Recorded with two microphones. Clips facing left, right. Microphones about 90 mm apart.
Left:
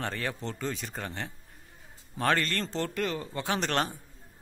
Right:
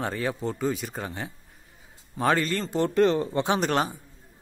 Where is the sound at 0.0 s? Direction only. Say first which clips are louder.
Right 5 dB; 10° right (ahead or behind).